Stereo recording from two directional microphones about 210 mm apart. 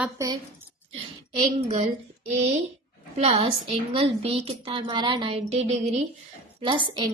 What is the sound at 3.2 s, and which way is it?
A woman's voice, 30° right (ahead or behind).